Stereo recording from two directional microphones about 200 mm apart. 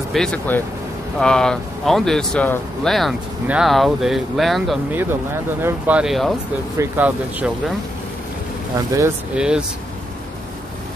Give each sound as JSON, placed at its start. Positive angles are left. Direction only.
{"t": 0.1, "sound": "speech", "side_deg": 5}
{"t": 4.9, "sound": "speech", "side_deg": -10}
{"t": 8.7, "sound": "speech", "side_deg": -15}